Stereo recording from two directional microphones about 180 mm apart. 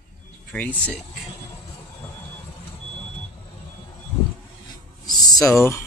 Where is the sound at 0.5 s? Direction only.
10° left (ahead or behind).